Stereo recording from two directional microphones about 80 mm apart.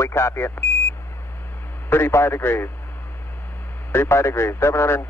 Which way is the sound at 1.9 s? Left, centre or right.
Left.